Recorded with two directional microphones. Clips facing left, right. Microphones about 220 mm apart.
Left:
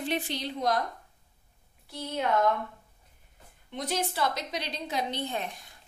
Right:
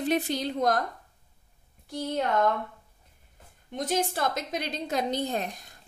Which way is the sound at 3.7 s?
45° right (ahead or behind).